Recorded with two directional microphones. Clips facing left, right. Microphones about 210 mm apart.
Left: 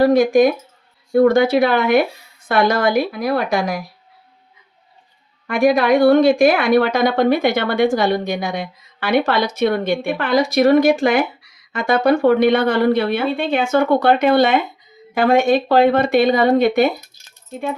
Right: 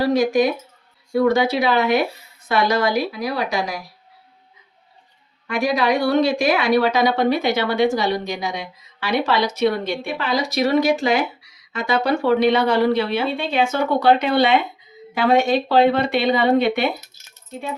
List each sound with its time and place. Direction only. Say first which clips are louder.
0.0 s a woman's voice: left 5 dB; 50° left (ahead or behind)
5.5 s a woman's voice: left 5 dB; 55° left (ahead or behind)